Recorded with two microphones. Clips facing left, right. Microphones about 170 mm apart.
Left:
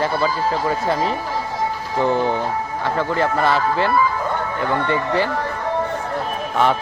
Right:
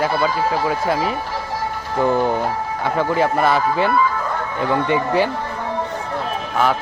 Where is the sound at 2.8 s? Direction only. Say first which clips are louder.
Right 2 dB; 15° right (ahead or behind).